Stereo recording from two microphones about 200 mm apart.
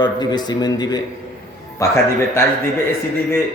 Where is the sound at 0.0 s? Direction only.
20° left (ahead or behind).